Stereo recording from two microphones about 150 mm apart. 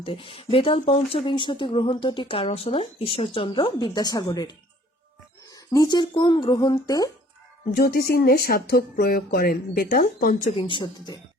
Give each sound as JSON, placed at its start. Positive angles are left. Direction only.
{"t": 0.0, "sound": "speech", "side_deg": 35}
{"t": 7.7, "sound": "speech", "side_deg": 90}
{"t": 10.5, "sound": "speech", "side_deg": 35}